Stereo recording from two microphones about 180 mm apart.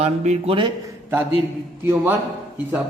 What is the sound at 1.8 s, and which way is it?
Speech, 15° right (ahead or behind).